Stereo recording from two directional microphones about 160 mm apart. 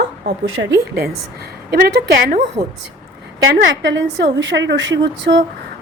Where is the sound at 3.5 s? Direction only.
90° right.